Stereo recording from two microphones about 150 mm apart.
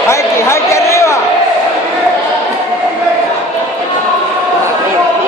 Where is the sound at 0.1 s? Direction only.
20° left (ahead or behind).